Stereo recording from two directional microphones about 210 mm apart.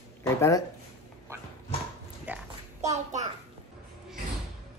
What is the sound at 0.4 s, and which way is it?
Speech, 15° left (ahead or behind).